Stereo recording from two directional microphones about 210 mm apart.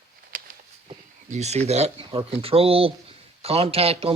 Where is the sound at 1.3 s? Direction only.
30° right (ahead or behind).